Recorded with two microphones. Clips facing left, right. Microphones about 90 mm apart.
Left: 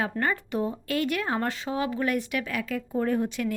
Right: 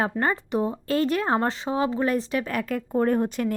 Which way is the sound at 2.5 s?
45° right (ahead or behind).